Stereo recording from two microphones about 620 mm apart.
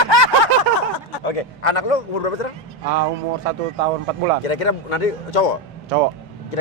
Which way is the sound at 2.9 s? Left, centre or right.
Right.